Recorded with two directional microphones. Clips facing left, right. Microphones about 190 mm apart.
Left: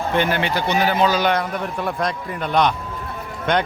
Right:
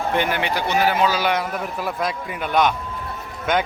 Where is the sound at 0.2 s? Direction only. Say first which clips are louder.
Left 2 dB; 10° right (ahead or behind).